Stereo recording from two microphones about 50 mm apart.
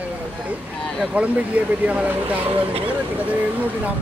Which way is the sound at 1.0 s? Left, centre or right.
Right.